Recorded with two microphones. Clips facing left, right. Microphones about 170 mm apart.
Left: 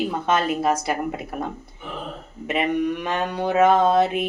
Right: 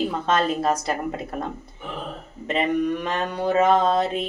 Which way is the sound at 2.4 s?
10° left (ahead or behind).